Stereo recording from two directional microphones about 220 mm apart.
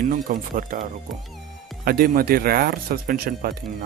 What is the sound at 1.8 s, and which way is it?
Speech, 40° right (ahead or behind).